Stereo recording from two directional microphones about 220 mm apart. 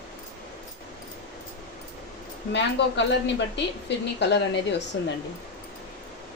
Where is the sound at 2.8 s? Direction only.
55° left (ahead or behind).